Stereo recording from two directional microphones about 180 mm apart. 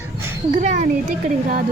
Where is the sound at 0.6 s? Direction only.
45° right (ahead or behind).